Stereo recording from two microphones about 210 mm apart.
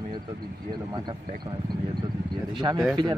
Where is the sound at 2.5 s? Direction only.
20° right (ahead or behind).